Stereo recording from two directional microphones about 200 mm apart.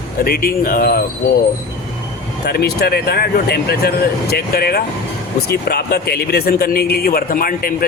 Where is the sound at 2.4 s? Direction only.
55° left (ahead or behind).